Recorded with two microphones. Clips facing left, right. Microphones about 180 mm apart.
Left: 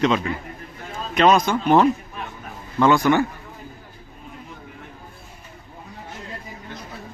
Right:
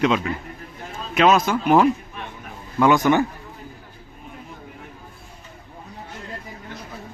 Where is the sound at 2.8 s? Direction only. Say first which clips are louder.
Even; 15° right (ahead or behind).